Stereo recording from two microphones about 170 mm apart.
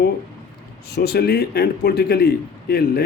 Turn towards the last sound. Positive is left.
turn(degrees=70)  # may be behind; listen again after turning